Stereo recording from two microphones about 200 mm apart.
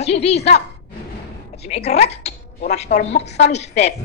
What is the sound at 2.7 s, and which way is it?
A woman's voice, 35° left (ahead or behind).